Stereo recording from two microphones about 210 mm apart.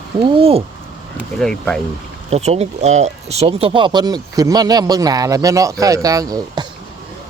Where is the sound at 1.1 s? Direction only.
5° left (ahead or behind).